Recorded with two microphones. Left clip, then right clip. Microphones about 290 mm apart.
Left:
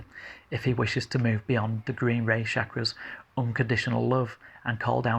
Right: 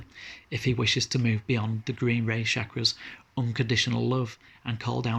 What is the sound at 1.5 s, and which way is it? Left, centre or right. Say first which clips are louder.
Speech: left 2 dB; centre.